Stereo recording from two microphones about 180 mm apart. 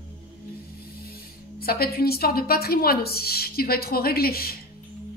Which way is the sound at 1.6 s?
55° left (ahead or behind).